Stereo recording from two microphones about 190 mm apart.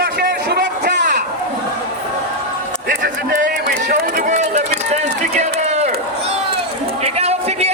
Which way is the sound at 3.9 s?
45° right (ahead or behind).